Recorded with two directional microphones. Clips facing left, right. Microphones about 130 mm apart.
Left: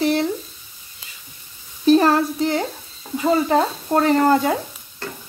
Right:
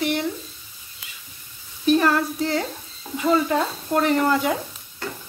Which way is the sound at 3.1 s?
35° left (ahead or behind).